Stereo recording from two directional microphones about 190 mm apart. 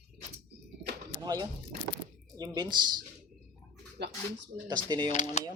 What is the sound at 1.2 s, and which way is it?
Speech, 20° right (ahead or behind).